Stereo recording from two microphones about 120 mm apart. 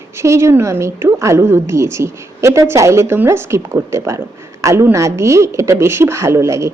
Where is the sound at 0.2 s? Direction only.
25° right (ahead or behind).